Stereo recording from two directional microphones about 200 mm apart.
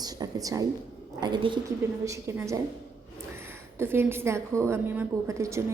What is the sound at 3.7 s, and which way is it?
A woman's voice, 10° right (ahead or behind).